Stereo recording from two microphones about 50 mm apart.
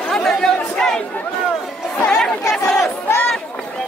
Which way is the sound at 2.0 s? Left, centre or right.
Centre.